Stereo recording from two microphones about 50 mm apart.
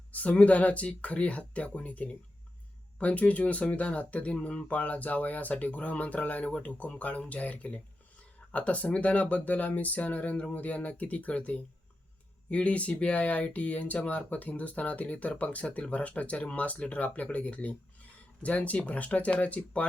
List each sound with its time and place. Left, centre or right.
0.1 s speech: left